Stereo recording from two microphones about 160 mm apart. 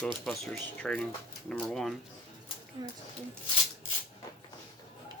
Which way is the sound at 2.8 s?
25° right (ahead or behind).